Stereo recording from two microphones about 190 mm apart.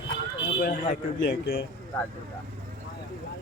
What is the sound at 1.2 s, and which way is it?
Speech, 60° left (ahead or behind).